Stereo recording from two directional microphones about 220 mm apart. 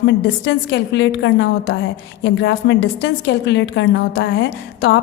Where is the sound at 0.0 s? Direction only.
55° left (ahead or behind).